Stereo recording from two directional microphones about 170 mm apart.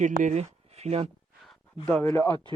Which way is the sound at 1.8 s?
10° left (ahead or behind).